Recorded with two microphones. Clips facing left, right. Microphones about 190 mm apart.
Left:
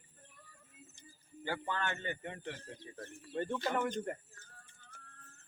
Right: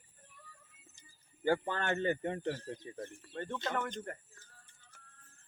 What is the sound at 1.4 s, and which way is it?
Speech, 40° right (ahead or behind).